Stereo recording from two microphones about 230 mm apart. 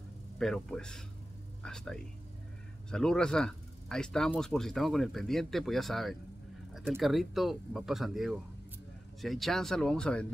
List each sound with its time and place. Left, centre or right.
0.4 s speech: centre